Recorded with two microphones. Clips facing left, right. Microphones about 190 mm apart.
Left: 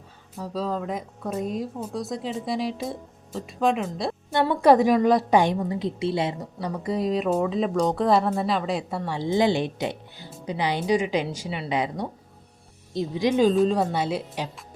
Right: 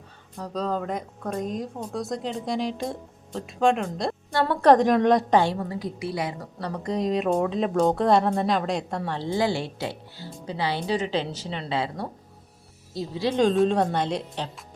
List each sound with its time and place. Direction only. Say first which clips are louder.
0.3 s speech: even; 5° left (ahead or behind)
5.4 s a woman's voice: left 2 dB; 15° left (ahead or behind)
6.6 s speech: even; 5° left (ahead or behind)
13.4 s speech: right 1 dB; centre (ahead or behind)